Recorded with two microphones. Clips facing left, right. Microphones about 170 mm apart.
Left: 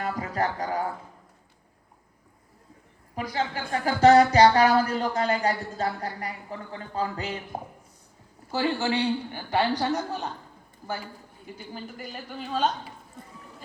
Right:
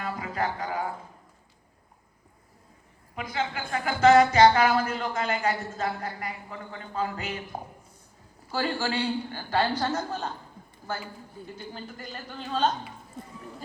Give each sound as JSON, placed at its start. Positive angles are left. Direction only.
{"t": 0.0, "sound": "music", "side_deg": 40}
{"t": 3.2, "sound": "a woman's voice", "side_deg": 35}
{"t": 11.4, "sound": "a woman's voice", "side_deg": 10}